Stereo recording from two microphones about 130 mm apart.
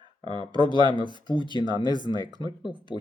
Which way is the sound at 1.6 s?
35° right (ahead or behind).